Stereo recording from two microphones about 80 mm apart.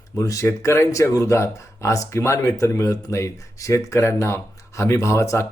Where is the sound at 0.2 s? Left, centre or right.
Left.